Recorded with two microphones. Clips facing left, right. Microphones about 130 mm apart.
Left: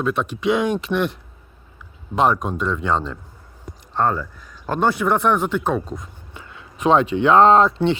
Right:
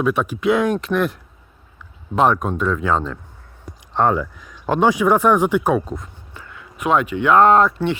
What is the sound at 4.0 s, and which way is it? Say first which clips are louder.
Speech: right 3 dB; 15° right (ahead or behind).